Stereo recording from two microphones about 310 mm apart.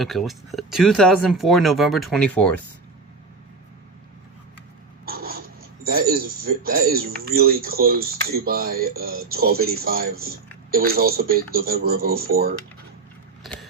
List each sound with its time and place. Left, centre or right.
0.0 s speech: centre
5.0 s writing: right
5.8 s speech: right
13.4 s a sound: centre